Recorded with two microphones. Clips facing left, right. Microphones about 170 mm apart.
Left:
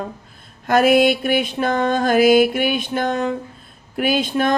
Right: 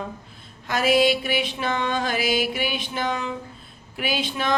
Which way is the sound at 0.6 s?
55° left (ahead or behind).